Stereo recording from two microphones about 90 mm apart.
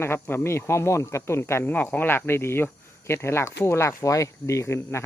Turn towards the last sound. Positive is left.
turn(degrees=30)  # may be behind; listen again after turning